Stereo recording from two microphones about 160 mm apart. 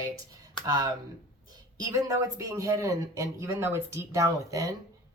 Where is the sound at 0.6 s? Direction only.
25° right (ahead or behind).